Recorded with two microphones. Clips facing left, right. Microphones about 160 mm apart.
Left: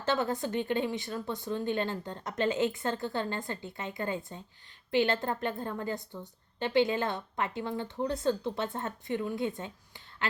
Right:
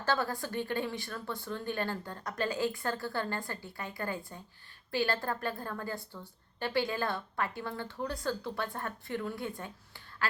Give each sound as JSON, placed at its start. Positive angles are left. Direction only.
{"t": 0.0, "sound": "speech", "side_deg": 20}